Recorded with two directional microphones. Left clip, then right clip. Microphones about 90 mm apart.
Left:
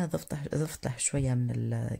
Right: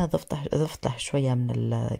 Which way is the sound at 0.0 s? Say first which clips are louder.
Right 7 dB; 20° right (ahead or behind).